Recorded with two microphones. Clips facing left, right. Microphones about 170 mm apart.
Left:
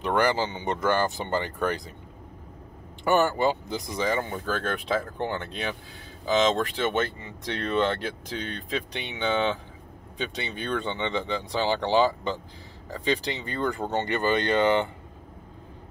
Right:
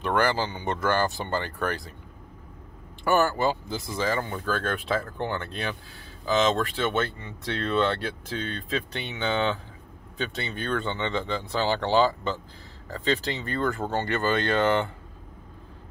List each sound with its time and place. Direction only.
0.0 s speech: 20° left (ahead or behind)
3.0 s speech: 20° left (ahead or behind)